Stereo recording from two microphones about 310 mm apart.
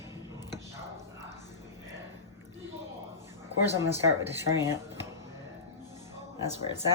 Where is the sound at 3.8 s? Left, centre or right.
Centre.